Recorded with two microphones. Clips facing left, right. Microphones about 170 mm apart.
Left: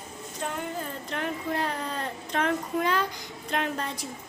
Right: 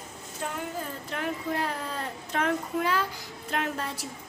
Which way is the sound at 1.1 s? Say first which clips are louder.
Even; 5° right (ahead or behind).